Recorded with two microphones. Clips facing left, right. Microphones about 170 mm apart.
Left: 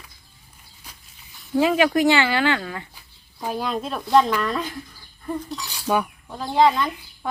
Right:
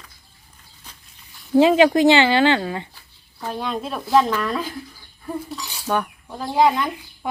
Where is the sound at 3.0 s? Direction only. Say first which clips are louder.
Left 1 dB; 10° left (ahead or behind).